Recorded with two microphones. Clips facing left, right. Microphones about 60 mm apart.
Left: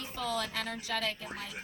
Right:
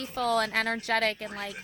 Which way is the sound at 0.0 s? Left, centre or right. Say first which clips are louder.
Right 8 dB; right.